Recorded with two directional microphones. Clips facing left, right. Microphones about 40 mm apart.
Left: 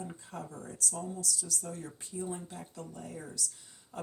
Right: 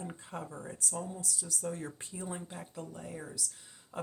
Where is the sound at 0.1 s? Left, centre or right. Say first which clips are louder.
Right 1 dB; right.